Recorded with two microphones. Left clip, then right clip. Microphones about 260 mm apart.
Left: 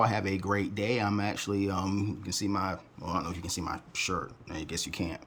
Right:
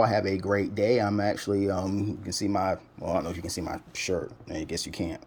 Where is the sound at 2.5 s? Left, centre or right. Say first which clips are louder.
Right 7 dB; left.